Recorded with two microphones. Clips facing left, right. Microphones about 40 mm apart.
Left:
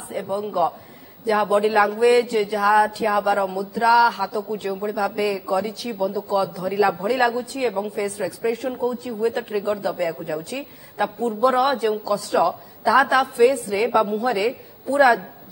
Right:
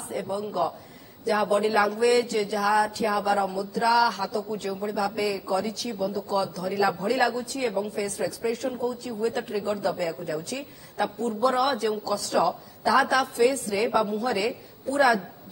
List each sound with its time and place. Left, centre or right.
0.1 s a man's voice: centre
7.5 s a woman's voice: left